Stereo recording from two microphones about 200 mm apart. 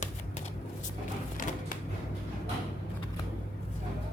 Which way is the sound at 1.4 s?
40° left (ahead or behind).